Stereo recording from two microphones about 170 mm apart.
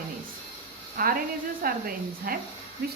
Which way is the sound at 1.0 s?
60° right (ahead or behind).